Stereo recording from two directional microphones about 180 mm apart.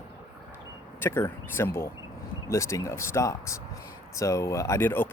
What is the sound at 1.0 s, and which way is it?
Speech, 15° left (ahead or behind).